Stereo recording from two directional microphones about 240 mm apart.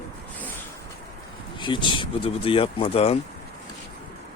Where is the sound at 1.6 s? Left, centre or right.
Centre.